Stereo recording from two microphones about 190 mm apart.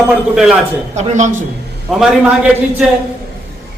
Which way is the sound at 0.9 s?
40° right (ahead or behind).